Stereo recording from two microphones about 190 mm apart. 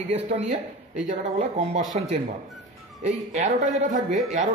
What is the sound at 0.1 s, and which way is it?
A man's voice, 30° right (ahead or behind).